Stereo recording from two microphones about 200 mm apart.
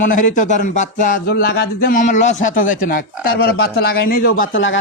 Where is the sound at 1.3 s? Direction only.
55° left (ahead or behind).